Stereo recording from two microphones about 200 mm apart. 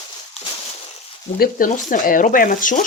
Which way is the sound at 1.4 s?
45° left (ahead or behind).